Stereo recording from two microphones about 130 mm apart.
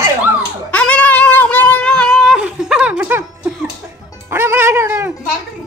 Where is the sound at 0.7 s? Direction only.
10° left (ahead or behind); by 3.2 s 10° right (ahead or behind).